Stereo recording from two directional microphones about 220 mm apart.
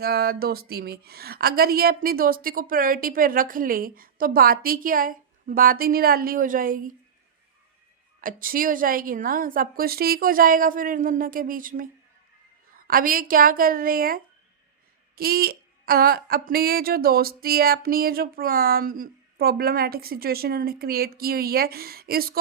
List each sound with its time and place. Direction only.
0.0 s a woman's voice: 45° right (ahead or behind)
8.2 s a woman's voice: 40° right (ahead or behind)